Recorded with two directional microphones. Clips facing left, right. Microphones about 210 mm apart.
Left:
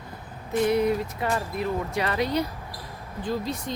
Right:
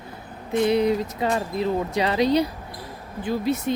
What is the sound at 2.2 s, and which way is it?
Speech, 80° right.